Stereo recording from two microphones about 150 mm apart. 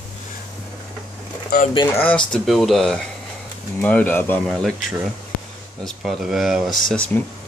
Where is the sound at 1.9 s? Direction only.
10° left (ahead or behind).